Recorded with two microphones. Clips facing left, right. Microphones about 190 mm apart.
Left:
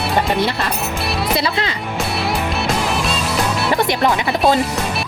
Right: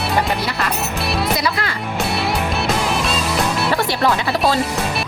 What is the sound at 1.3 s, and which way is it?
Speech, 25° left (ahead or behind).